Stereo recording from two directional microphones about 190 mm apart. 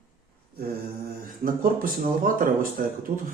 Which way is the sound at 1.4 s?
50° right (ahead or behind).